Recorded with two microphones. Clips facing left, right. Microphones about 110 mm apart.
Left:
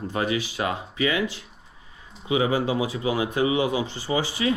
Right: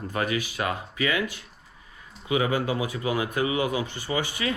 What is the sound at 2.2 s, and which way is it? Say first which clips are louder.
Speech: left 2 dB; 25° left (ahead or behind).